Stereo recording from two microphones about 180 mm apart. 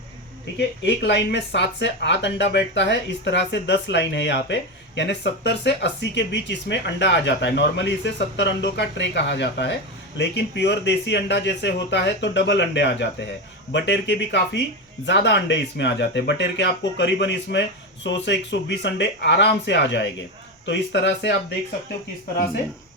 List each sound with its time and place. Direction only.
0.9 s speech: 70° left (ahead or behind)